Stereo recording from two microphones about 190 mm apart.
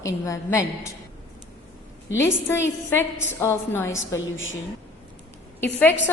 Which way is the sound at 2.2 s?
15° left (ahead or behind).